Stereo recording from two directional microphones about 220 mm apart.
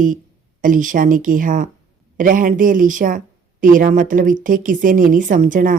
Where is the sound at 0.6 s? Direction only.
35° right (ahead or behind).